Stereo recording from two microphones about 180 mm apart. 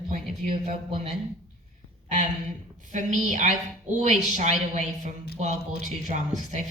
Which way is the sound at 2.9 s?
45° right (ahead or behind).